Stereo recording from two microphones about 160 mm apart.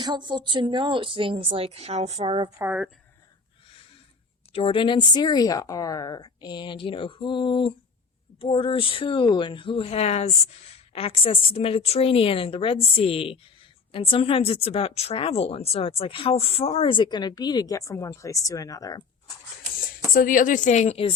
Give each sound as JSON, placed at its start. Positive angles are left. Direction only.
{"t": 0.0, "sound": "speech", "side_deg": -30}
{"t": 2.6, "sound": "speech", "side_deg": -10}
{"t": 4.5, "sound": "speech", "side_deg": 35}
{"t": 20.1, "sound": "a woman's voice", "side_deg": 60}